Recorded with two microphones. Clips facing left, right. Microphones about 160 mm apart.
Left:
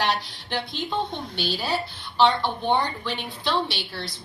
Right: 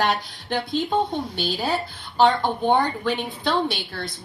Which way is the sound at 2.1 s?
45° right (ahead or behind).